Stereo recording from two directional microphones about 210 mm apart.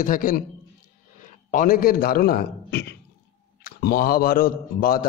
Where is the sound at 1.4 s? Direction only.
40° left (ahead or behind).